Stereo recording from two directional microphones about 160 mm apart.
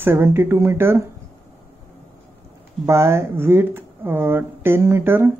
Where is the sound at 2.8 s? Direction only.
15° right (ahead or behind).